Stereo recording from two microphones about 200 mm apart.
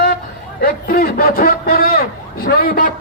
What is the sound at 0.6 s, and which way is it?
A man's voice, 45° left (ahead or behind).